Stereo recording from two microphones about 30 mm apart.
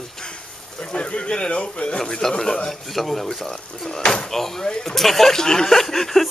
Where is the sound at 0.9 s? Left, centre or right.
Left.